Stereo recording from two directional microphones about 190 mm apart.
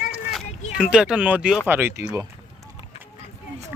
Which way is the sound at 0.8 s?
5° right (ahead or behind).